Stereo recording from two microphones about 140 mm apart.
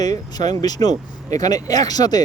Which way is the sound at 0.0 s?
30° left (ahead or behind).